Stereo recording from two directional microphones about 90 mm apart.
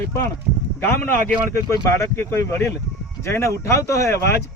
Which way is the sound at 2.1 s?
30° left (ahead or behind).